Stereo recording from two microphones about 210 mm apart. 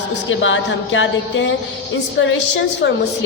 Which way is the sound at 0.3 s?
65° left (ahead or behind).